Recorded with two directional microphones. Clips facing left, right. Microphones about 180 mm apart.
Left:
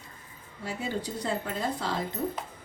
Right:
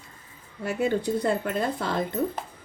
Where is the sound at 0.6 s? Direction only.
55° right (ahead or behind).